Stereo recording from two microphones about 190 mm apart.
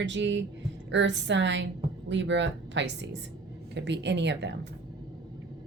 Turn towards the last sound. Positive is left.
turn(degrees=-65)  # may be behind; listen again after turning